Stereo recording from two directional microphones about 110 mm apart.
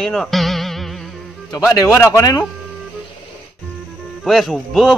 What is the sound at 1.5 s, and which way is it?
Speech, 30° left (ahead or behind).